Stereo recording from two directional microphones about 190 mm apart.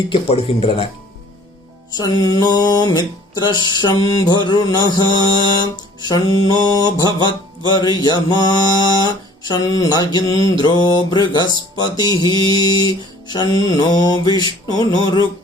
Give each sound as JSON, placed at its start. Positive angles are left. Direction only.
{"t": 0.1, "sound": "music", "side_deg": 30}
{"t": 2.0, "sound": "music", "side_deg": 20}